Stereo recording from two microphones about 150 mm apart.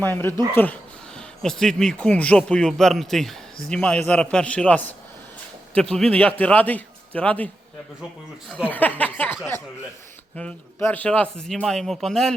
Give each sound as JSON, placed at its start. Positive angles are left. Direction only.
{"t": 0.0, "sound": "a man's voice", "side_deg": 15}